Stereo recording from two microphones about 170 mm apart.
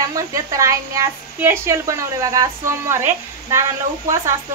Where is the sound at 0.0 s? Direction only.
20° right (ahead or behind).